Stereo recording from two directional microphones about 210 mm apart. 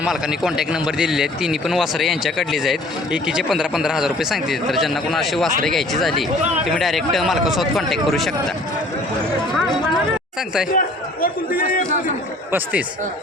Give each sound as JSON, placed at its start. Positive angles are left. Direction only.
{"t": 0.0, "sound": "a man's voice", "side_deg": -5}
{"t": 10.8, "sound": "a man's voice", "side_deg": 40}
{"t": 12.5, "sound": "speech", "side_deg": -10}